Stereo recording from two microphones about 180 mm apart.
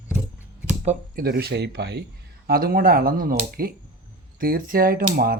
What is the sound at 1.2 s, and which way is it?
Speech, 60° right (ahead or behind).